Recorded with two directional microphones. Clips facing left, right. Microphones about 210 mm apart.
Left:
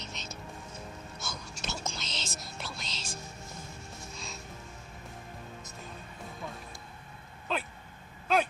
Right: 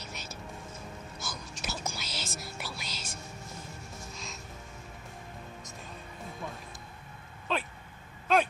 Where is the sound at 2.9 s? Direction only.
30° left (ahead or behind).